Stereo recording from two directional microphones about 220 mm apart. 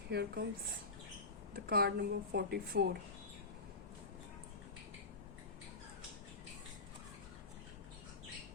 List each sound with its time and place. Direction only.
0.1 s speech: 50° right (ahead or behind)
1.5 s speech: 45° right (ahead or behind)